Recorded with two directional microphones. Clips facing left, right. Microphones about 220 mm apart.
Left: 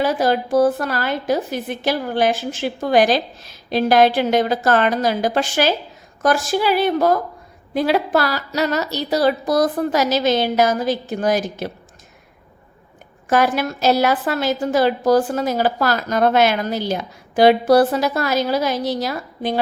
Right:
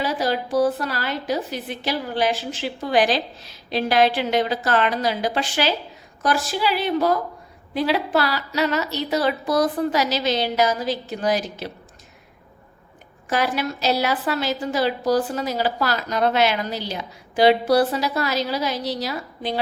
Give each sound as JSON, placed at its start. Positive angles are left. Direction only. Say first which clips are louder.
{"t": 0.0, "sound": "a woman's voice", "louder": "left 5 dB", "side_deg": 50}
{"t": 13.3, "sound": "a woman's voice", "louder": "left 5 dB", "side_deg": 50}